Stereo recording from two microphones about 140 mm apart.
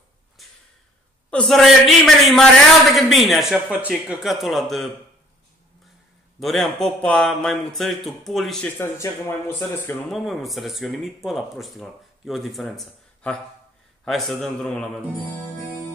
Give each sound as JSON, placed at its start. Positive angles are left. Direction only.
{"t": 0.4, "sound": "a sound", "side_deg": 0}
{"t": 1.3, "sound": "speech", "side_deg": 5}
{"t": 6.4, "sound": "speech", "side_deg": 0}
{"t": 8.7, "sound": "speech", "side_deg": 15}
{"t": 10.0, "sound": "speech", "side_deg": 0}